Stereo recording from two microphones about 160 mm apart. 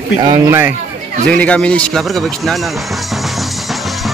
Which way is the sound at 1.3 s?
5° left (ahead or behind).